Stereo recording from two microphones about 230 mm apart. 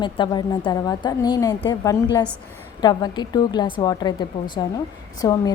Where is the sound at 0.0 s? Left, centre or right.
Left.